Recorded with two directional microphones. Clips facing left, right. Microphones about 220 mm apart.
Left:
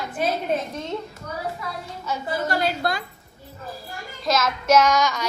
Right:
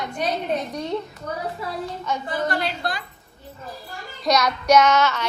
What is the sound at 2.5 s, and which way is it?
Speech, 45° left (ahead or behind).